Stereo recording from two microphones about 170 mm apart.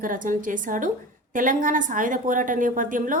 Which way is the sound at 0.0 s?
50° right (ahead or behind).